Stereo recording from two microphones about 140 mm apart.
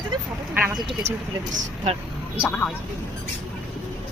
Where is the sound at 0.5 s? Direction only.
10° right (ahead or behind).